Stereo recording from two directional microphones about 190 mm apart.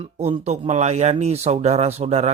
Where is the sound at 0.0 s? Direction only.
30° right (ahead or behind).